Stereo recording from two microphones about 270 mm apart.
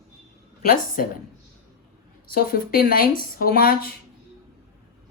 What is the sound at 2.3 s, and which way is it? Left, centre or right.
A woman's voice, left.